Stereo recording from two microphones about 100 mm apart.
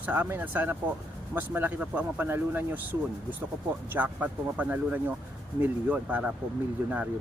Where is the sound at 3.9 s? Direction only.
15° right (ahead or behind).